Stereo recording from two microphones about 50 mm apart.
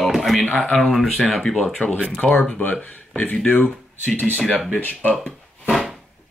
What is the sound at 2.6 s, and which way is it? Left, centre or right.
Speech, left.